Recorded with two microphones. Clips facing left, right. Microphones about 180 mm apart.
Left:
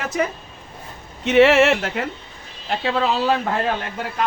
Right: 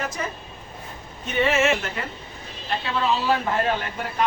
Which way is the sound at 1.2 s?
85° left.